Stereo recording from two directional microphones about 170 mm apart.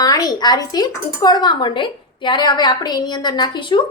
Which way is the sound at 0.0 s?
20° left (ahead or behind).